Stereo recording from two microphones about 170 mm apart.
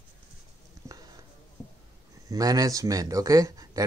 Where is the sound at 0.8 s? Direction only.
15° right (ahead or behind).